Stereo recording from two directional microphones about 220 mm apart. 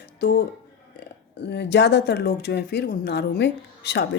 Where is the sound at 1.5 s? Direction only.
50° left (ahead or behind).